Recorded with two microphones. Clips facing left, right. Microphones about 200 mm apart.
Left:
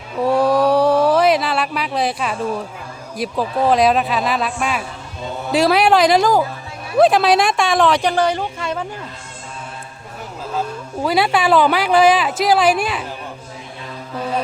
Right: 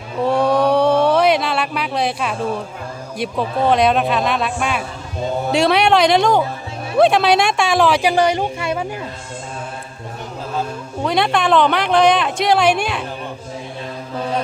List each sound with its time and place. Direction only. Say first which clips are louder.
0.2 s a sound: left 1 dB; centre (ahead or behind)
3.2 s a woman's voice: even; centre (ahead or behind)
8.1 s speech: right 2 dB; 15° right (ahead or behind)
11.0 s a woman's voice: left 1 dB; 5° left (ahead or behind)